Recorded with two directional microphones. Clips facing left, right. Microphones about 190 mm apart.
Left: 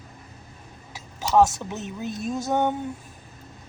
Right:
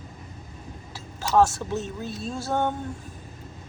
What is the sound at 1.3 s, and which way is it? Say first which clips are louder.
Speech: left 1 dB; 15° left (ahead or behind).